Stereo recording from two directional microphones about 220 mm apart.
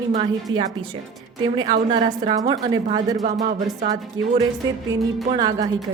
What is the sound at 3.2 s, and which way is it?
Speech, 35° right (ahead or behind).